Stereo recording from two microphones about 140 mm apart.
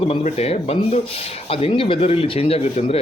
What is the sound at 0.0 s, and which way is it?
Speech, 50° left (ahead or behind).